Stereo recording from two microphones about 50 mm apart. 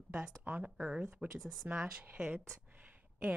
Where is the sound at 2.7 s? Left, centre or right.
Right.